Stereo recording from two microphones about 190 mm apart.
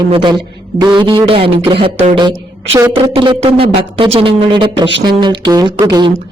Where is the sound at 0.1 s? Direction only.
25° right (ahead or behind).